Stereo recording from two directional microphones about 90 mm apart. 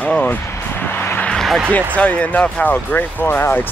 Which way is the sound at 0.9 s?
25° left (ahead or behind).